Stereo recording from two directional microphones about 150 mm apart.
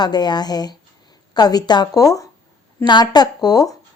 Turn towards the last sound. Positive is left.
turn(degrees=25)  # may be behind; listen again after turning